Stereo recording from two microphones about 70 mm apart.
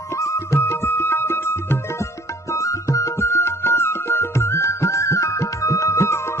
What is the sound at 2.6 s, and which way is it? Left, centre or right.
Music, left.